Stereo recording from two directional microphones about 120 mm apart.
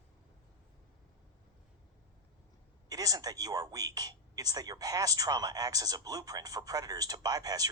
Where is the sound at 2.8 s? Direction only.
30° right (ahead or behind).